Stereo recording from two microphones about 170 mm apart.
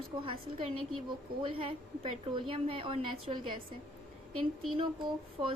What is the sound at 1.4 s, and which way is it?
A woman's voice, 35° right (ahead or behind).